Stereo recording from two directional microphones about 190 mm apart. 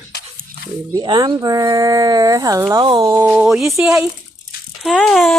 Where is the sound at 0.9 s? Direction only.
20° right (ahead or behind).